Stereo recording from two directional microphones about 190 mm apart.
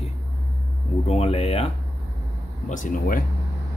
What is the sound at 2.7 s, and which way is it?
Speech, 45° left (ahead or behind).